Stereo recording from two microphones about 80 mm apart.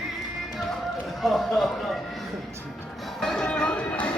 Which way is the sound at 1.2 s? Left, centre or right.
Centre.